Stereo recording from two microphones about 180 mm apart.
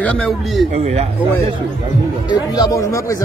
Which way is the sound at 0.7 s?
35° right (ahead or behind).